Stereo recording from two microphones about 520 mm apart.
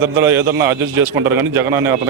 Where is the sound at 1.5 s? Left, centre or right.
Right.